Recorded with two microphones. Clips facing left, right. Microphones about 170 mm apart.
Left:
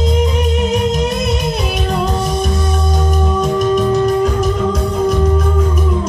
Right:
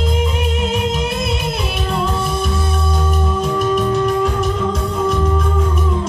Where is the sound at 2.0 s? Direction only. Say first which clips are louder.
Left 3 dB; 40° left (ahead or behind).